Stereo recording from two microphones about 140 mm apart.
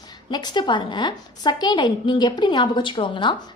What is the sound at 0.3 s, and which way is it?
A woman's voice, 30° left (ahead or behind).